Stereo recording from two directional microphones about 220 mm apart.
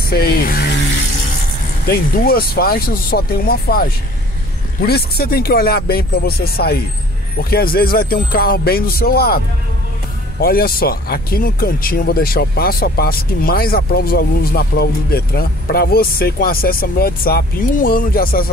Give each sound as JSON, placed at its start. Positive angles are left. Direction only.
{"t": 0.1, "sound": "speech", "side_deg": 45}
{"t": 1.9, "sound": "speech", "side_deg": 45}
{"t": 10.4, "sound": "speech", "side_deg": 45}